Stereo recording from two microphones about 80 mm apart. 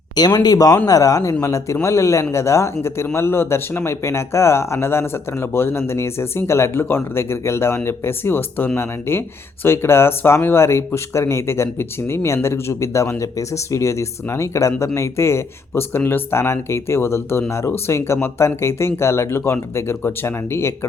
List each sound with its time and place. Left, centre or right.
0.3 s speech: left